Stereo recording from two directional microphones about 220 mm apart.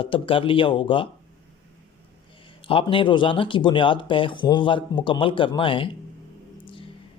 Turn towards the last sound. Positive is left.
turn(degrees=25)  # may be behind; listen again after turning